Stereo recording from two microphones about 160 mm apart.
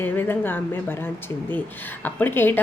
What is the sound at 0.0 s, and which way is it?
A woman's voice, 15° left (ahead or behind).